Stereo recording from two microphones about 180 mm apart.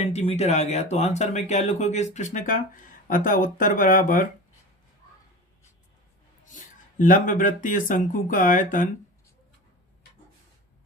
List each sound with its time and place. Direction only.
0.0 s speech: 35° left (ahead or behind)
7.0 s speech: 45° left (ahead or behind)